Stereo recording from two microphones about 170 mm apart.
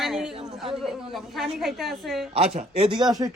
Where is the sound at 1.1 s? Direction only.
Centre (ahead or behind).